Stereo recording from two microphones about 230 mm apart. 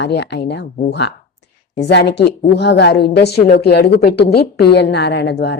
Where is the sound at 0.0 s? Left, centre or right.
Left.